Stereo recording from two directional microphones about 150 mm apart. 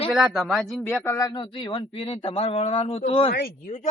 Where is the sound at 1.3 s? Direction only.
35° left (ahead or behind).